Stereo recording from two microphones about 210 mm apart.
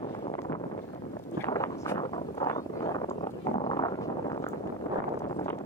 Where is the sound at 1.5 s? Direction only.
15° left (ahead or behind).